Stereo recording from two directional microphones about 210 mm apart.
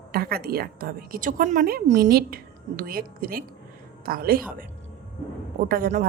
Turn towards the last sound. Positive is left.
turn(degrees=-45)  # may be behind; listen again after turning